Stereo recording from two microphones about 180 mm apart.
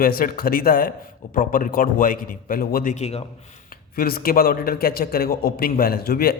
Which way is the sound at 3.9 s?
55° left (ahead or behind).